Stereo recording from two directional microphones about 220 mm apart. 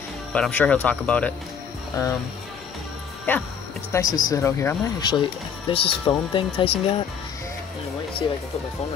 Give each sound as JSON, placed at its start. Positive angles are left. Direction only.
{"t": 0.3, "sound": "speech", "side_deg": 5}
{"t": 3.3, "sound": "speech", "side_deg": 10}